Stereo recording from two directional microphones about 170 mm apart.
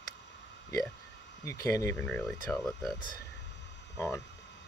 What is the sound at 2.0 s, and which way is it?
Speech, 5° left (ahead or behind).